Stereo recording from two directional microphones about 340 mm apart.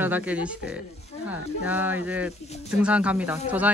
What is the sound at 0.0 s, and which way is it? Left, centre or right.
Speech, centre.